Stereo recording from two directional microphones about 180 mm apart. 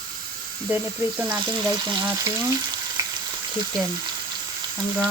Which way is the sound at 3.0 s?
20° right (ahead or behind).